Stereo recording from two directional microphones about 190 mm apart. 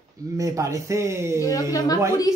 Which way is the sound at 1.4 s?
20° left (ahead or behind).